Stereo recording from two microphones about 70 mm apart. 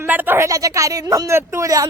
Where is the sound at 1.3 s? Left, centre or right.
Right.